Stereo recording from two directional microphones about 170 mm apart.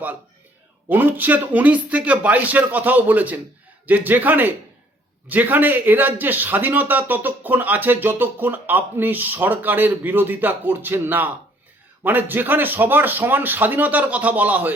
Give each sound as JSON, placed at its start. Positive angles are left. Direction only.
{"t": 0.9, "sound": "speech", "side_deg": -10}